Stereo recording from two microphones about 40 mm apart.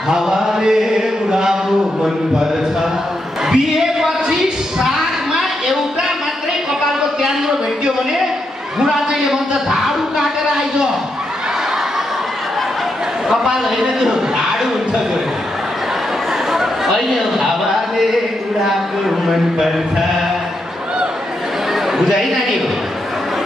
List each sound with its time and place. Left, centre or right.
0.1 s mantra: centre
3.4 s a sound: centre
7.2 s a sound: centre
13.3 s a man's voice: centre
16.5 s a man's voice: centre
22.0 s a man's voice: centre